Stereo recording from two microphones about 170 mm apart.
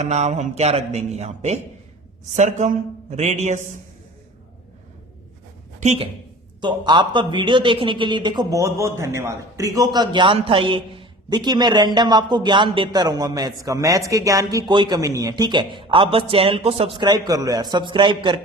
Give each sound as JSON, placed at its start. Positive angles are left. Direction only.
{"t": 0.0, "sound": "a man's voice", "side_deg": -40}
{"t": 5.8, "sound": "speech", "side_deg": -40}
{"t": 6.6, "sound": "a man's voice", "side_deg": -25}